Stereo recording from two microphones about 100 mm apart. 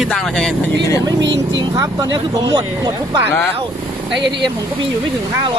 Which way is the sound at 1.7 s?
40° right (ahead or behind).